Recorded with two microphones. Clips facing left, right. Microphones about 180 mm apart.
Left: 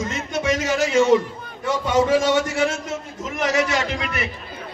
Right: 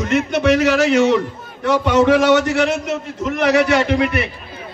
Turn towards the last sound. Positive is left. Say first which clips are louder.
# right 9 dB
turn(degrees=-60)  # may be behind; listen again after turning